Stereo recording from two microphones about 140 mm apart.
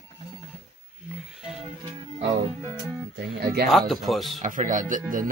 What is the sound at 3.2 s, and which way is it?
Speech, 90° right.